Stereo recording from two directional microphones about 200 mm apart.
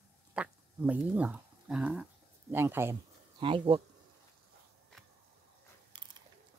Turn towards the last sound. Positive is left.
turn(degrees=-20)  # may be behind; listen again after turning